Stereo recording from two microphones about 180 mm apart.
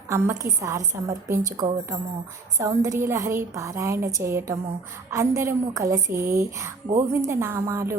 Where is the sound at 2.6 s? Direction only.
15° right (ahead or behind).